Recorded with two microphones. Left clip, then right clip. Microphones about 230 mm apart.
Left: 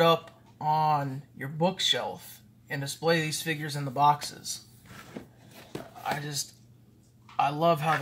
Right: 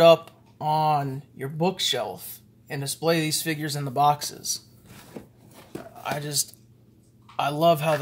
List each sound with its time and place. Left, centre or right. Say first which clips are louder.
0.0 s speech: right 8 dB; right
6.0 s speech: right 4 dB; right